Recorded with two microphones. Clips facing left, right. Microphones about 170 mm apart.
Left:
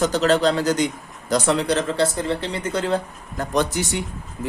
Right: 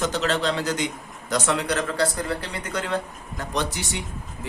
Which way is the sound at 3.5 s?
45° left (ahead or behind).